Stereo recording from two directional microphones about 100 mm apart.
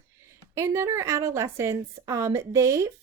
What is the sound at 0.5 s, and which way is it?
A woman's voice, 30° right (ahead or behind).